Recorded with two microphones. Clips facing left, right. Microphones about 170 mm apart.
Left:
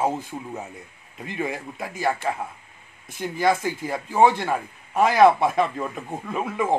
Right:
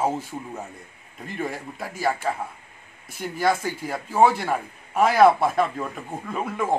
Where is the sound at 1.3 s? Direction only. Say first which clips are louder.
Left 1 dB; centre (ahead or behind).